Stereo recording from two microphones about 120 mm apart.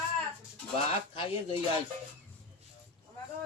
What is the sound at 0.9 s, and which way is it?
Speech, 50° left (ahead or behind).